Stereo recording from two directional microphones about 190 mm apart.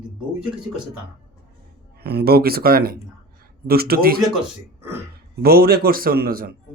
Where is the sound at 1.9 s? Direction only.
55° right (ahead or behind).